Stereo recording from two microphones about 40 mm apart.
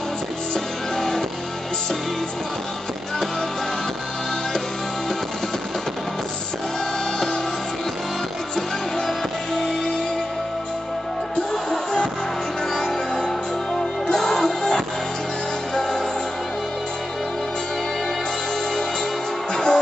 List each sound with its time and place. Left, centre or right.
0.9 s music: centre
8.5 s music: centre
12.7 s music: centre
14.1 s music: centre
19.5 s music: centre